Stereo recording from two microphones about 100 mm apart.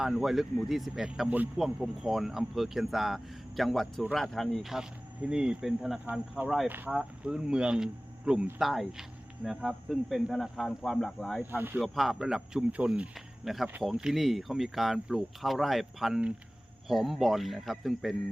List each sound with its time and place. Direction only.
0.0 s speech: 5° right (ahead or behind)
6.7 s speech: 20° right (ahead or behind)
6.9 s speech: 5° right (ahead or behind)
11.5 s speech: 20° right (ahead or behind)
11.8 s speech: centre (ahead or behind)